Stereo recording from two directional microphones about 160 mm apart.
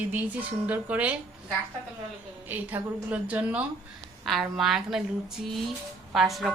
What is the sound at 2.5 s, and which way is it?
A woman's voice, 10° right (ahead or behind).